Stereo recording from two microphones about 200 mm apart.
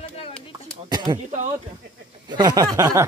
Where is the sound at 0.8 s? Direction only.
20° right (ahead or behind).